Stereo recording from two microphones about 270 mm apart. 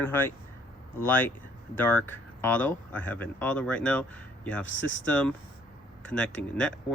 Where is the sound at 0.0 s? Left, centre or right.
Centre.